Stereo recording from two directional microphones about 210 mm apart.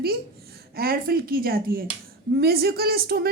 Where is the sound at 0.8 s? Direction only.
45° right (ahead or behind).